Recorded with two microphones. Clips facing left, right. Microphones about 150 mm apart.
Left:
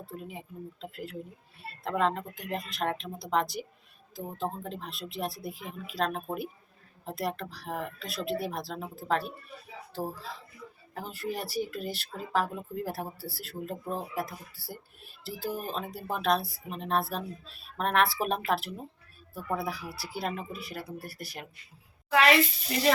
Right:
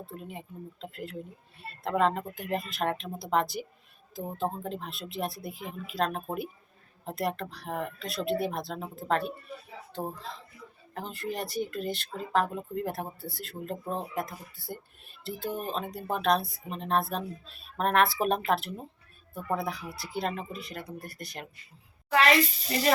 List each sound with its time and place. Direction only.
0.0 s speech: centre (ahead or behind)